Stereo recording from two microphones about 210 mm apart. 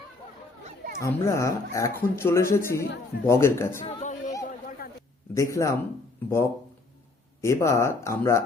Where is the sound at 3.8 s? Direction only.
35° left (ahead or behind).